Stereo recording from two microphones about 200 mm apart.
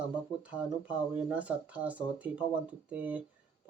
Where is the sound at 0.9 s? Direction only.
5° right (ahead or behind).